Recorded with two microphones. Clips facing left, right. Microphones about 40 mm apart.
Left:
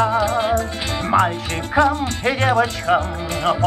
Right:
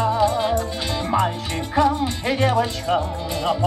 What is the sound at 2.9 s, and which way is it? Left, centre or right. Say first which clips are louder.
Speech: left 4 dB; left.